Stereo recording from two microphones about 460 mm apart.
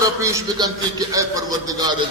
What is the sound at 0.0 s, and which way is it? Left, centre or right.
A man's voice, centre.